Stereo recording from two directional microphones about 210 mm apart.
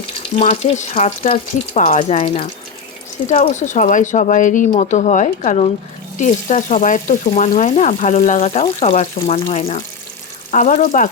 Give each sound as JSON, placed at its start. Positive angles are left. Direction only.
{"t": 0.3, "sound": "frying", "side_deg": 30}